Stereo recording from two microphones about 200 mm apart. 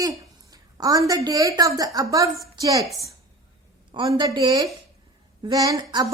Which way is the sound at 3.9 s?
25° right (ahead or behind).